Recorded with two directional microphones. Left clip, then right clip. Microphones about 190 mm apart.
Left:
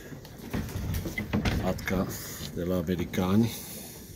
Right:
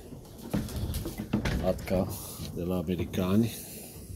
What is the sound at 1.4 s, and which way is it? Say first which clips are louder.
Speech: right 2 dB; 10° right (ahead or behind).